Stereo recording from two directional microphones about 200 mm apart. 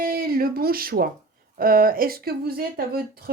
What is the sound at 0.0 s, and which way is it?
Speech, 50° right (ahead or behind).